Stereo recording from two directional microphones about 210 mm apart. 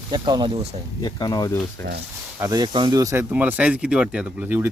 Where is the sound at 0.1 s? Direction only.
20° right (ahead or behind).